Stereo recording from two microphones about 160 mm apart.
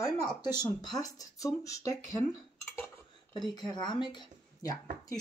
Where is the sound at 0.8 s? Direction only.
20° left (ahead or behind).